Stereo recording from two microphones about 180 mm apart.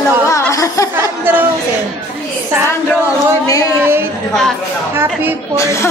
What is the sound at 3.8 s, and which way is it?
Speech, 15° right (ahead or behind).